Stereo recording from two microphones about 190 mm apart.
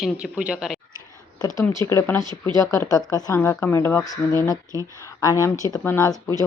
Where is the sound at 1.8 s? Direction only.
15° left (ahead or behind).